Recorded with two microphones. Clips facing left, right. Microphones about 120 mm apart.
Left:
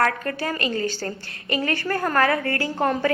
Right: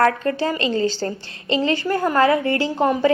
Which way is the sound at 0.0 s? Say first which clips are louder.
Right 5 dB; 25° right (ahead or behind).